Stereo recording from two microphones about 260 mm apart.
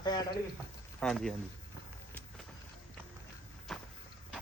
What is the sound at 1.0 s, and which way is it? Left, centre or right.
Speech, centre.